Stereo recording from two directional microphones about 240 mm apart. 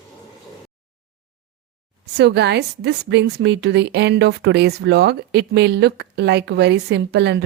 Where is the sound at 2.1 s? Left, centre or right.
Right.